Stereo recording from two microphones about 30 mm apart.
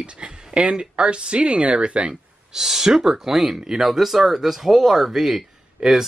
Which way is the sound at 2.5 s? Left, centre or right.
Centre.